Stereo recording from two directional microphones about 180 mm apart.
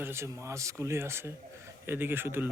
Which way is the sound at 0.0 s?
15° right (ahead or behind).